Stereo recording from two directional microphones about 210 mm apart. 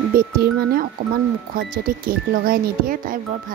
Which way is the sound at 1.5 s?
45° right (ahead or behind).